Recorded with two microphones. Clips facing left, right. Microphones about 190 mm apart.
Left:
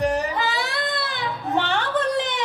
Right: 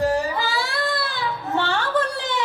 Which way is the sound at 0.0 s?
20° left (ahead or behind).